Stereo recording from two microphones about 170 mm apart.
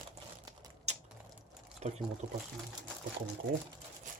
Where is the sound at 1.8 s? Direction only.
40° right (ahead or behind).